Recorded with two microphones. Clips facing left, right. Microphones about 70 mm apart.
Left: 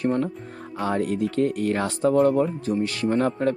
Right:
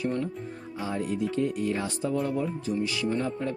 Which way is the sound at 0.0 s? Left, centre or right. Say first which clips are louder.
Left 6 dB; left.